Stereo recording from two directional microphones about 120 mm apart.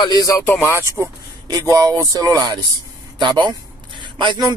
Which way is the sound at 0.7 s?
25° right (ahead or behind).